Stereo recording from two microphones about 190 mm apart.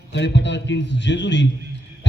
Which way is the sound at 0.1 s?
70° left (ahead or behind).